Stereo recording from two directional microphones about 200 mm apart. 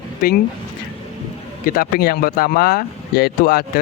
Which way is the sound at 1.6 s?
45° left (ahead or behind).